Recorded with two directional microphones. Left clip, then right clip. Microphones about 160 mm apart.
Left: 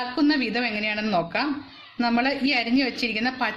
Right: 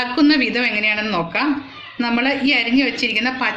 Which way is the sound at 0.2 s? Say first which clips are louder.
Right 7 dB; 55° left (ahead or behind).